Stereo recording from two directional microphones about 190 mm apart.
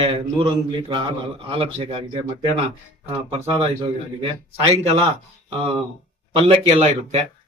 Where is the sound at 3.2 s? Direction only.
30° right (ahead or behind).